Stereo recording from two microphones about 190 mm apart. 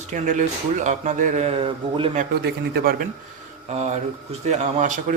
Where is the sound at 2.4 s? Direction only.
55° right (ahead or behind).